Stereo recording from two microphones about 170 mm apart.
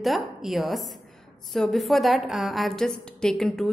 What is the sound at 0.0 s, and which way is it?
A woman's voice, centre (ahead or behind).